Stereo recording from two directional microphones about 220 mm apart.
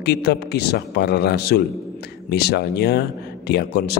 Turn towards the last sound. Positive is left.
turn(degrees=45)  # may be behind; listen again after turning